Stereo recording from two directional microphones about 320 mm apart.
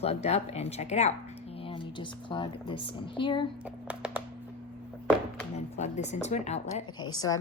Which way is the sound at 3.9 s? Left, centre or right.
Centre.